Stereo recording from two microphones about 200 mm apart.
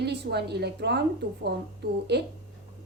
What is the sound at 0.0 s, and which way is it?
A woman's voice, 55° right (ahead or behind).